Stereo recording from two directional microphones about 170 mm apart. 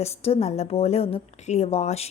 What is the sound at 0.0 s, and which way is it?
A woman's voice, 35° left (ahead or behind).